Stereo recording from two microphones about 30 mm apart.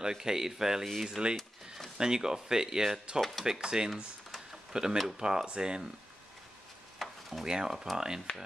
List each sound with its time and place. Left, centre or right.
0.0 s speech: centre
3.2 s speech: centre
3.4 s speech: right
7.0 s a sound: centre
7.4 s speech: right
7.7 s speech: centre
8.3 s speech: left